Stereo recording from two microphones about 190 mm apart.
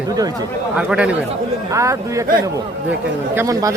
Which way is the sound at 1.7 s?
15° right (ahead or behind).